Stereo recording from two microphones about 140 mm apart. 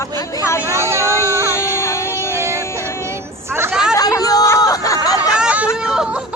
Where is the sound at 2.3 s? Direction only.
20° right (ahead or behind).